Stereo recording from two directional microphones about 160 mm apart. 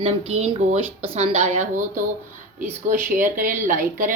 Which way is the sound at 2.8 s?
55° right (ahead or behind).